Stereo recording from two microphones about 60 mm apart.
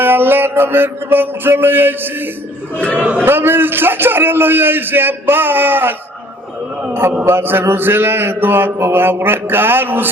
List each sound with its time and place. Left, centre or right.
0.0 s mantra: right
2.7 s a man's voice: left
3.0 s a man's voice: right
3.2 s a man's voice: right
7.3 s a man's voice: right